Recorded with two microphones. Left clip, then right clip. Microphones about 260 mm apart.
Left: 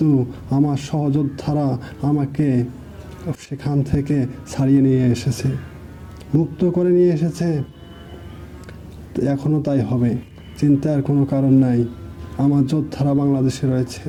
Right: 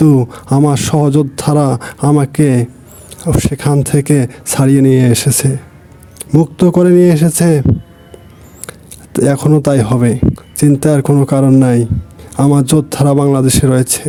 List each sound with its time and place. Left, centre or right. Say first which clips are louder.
0.0 s speech: right 8 dB; right
9.1 s speech: right 10 dB; right